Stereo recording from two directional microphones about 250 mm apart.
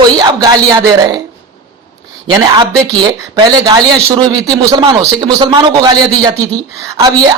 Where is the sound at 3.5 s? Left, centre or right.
Centre.